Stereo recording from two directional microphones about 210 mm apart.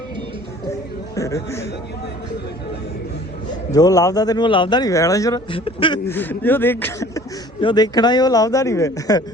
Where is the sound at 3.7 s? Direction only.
15° left (ahead or behind).